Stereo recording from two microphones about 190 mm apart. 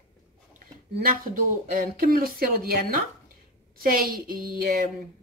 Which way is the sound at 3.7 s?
50° right (ahead or behind).